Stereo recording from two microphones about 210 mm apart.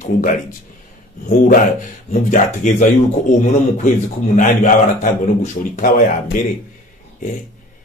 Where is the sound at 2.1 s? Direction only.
35° left (ahead or behind).